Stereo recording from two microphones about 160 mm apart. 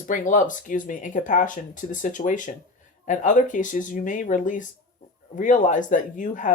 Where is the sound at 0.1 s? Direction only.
55° left (ahead or behind).